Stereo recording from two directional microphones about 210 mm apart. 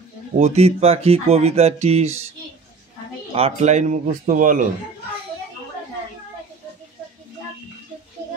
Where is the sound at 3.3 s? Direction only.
30° right (ahead or behind).